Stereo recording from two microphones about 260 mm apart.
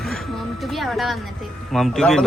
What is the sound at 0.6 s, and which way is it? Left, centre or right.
Music, centre.